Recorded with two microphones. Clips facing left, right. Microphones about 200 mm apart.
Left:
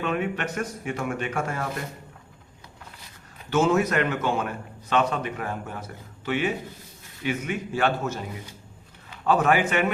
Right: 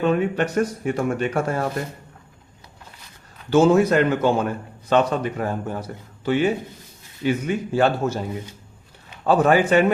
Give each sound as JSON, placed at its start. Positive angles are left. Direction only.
{"t": 0.0, "sound": "a man's voice", "side_deg": -35}
{"t": 3.5, "sound": "a man's voice", "side_deg": -30}
{"t": 9.2, "sound": "a man's voice", "side_deg": -35}